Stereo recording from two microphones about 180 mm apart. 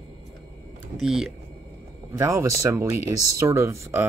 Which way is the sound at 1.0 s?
Centre (ahead or behind).